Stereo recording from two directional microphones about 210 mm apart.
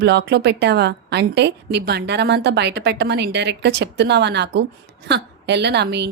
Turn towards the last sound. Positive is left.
turn(degrees=-55)  # may be behind; listen again after turning